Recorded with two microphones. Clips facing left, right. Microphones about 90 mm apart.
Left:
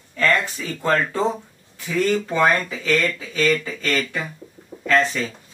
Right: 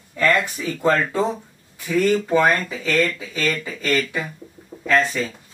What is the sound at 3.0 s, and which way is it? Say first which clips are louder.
Speech: right 1 dB; centre (ahead or behind).